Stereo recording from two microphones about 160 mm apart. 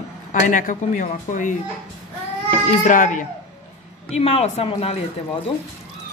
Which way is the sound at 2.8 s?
55° left (ahead or behind).